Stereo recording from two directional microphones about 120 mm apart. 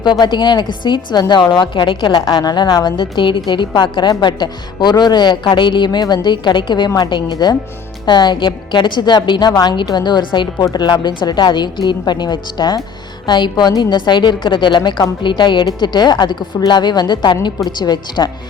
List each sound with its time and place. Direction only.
0.0 s a woman's voice: 40° left (ahead or behind)